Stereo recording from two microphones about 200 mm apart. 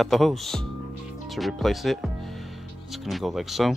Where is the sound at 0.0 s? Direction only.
Centre (ahead or behind).